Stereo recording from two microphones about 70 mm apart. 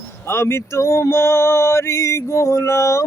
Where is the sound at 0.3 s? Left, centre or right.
Left.